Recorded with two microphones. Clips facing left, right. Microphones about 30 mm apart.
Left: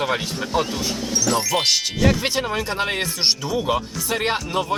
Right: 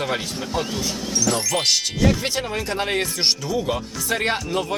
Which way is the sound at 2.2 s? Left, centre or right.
Centre.